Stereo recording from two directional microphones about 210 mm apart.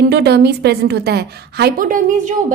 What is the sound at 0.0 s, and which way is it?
A woman's voice, 50° right (ahead or behind).